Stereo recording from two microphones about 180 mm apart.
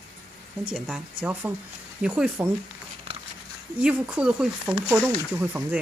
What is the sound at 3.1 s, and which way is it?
Dog, 30° right (ahead or behind).